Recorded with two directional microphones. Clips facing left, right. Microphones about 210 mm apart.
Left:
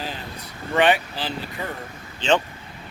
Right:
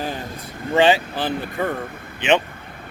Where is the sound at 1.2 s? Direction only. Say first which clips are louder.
Right 6 dB; 55° right (ahead or behind).